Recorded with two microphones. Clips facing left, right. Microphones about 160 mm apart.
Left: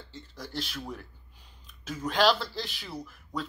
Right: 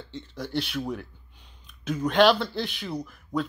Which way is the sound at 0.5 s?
65° right (ahead or behind).